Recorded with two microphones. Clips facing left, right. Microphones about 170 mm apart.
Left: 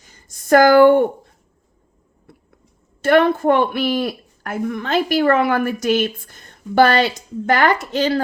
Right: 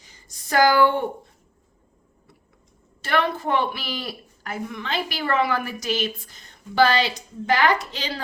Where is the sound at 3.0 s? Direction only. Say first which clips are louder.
Left 10 dB; 50° left (ahead or behind).